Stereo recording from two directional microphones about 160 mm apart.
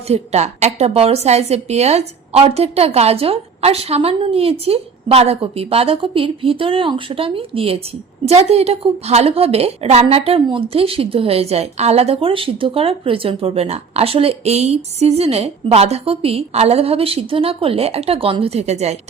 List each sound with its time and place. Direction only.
0.1 s a woman's voice: 40° right (ahead or behind)